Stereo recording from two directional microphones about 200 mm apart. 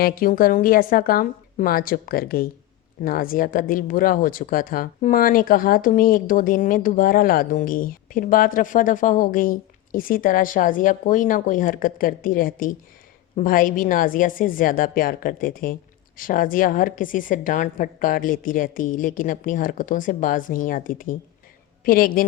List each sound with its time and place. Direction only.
0.0 s speech: 45° left (ahead or behind)